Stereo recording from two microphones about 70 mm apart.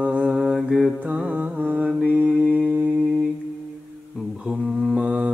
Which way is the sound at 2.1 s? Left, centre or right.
Centre.